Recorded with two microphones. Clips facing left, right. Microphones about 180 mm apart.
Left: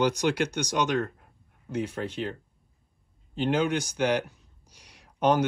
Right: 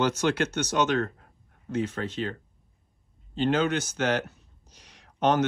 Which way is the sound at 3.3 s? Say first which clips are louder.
Right 1 dB; 10° left (ahead or behind).